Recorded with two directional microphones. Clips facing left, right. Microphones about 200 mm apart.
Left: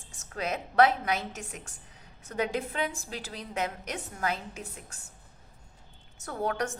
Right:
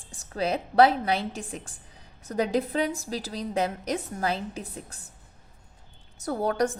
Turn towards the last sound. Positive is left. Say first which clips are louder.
# right 6 dB
turn(degrees=-35)  # may be behind; listen again after turning